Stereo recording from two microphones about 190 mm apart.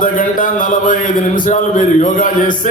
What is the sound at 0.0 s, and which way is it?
Speech, 45° left (ahead or behind).